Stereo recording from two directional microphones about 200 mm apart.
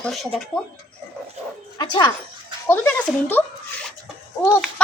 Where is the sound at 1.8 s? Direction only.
20° left (ahead or behind).